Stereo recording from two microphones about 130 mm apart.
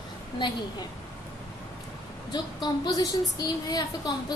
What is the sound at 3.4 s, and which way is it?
Speech, 30° left (ahead or behind).